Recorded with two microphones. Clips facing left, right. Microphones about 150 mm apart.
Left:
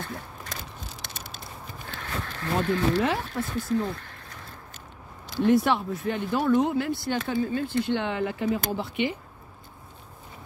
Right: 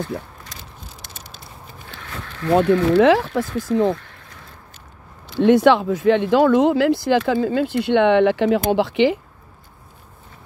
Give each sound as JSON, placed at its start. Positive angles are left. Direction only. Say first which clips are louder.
{"t": 1.0, "sound": "a sound", "louder": "even", "side_deg": 70}
{"t": 2.7, "sound": "speech", "louder": "right 10 dB", "side_deg": -90}
{"t": 5.4, "sound": "speech", "louder": "right 8 dB", "side_deg": -90}